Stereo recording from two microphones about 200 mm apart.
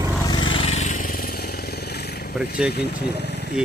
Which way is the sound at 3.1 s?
55° left (ahead or behind).